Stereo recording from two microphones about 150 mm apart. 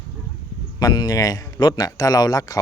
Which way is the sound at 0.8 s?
25° left (ahead or behind).